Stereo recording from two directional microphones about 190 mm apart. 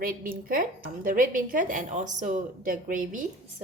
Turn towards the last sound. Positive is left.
turn(degrees=-45)  # may be behind; listen again after turning